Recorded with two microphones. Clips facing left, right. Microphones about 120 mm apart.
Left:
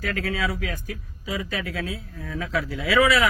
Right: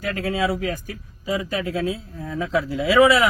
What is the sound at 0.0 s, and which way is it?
A man's voice, 25° right (ahead or behind).